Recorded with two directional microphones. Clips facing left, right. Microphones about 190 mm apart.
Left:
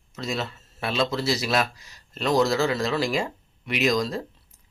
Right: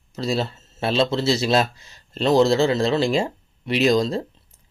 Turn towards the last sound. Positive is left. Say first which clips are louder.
# right 5 dB
turn(degrees=-25)  # may be behind; listen again after turning